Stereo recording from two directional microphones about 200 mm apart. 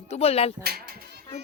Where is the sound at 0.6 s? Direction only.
50° right (ahead or behind).